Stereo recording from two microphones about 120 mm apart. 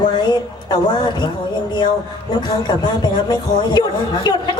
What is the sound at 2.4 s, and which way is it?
A woman's voice, 35° left (ahead or behind).